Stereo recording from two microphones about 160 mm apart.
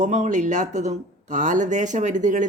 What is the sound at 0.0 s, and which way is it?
Speech, 50° right (ahead or behind).